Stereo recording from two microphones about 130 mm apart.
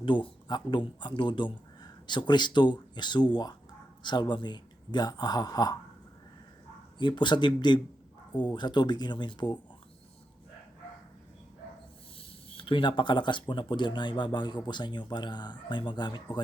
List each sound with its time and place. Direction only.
0.0 s a man's voice: 40° left (ahead or behind)
7.0 s a man's voice: 35° left (ahead or behind)
12.5 s a man's voice: 40° left (ahead or behind)